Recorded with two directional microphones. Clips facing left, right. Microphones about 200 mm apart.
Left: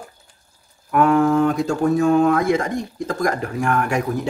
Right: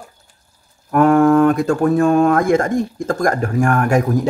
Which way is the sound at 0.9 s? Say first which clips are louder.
Right 4 dB; 50° right (ahead or behind).